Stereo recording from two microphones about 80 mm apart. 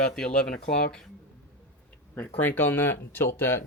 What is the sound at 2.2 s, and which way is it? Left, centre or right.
Speech, left.